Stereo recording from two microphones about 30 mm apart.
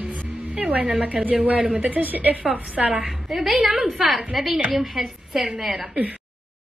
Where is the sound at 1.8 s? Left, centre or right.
Right.